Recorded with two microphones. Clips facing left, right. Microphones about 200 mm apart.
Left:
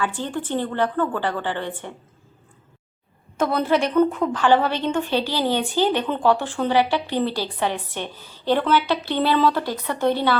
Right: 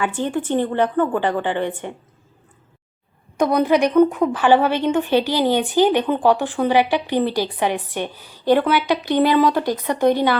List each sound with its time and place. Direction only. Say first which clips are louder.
0.0 s a woman's voice: right 4 dB; 15° right (ahead or behind)
3.3 s a woman's voice: right 4 dB; 15° right (ahead or behind)